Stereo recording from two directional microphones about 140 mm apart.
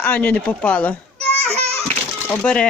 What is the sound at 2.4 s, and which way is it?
Speech, 5° left (ahead or behind).